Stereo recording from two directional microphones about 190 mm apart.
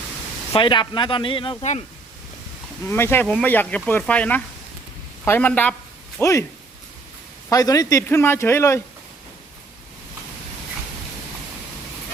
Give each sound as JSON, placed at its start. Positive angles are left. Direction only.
{"t": 0.5, "sound": "speech", "side_deg": 25}
{"t": 2.8, "sound": "speech", "side_deg": 10}
{"t": 7.5, "sound": "speech", "side_deg": 20}